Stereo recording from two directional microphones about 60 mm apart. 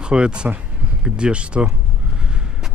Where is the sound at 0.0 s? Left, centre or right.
Centre.